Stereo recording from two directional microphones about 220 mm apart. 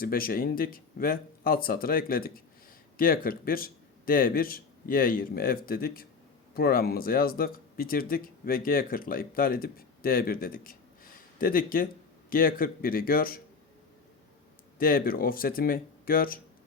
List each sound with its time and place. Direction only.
0.0 s speech: 40° left (ahead or behind)
14.8 s speech: 40° left (ahead or behind)